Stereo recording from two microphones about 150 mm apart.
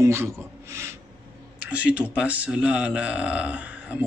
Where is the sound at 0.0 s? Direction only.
15° right (ahead or behind).